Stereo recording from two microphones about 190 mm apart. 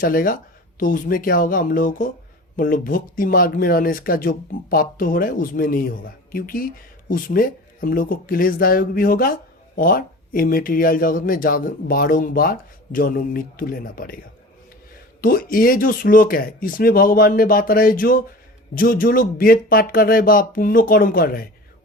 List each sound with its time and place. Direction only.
0.0 s speech: 45° left (ahead or behind)
15.2 s speech: 50° left (ahead or behind)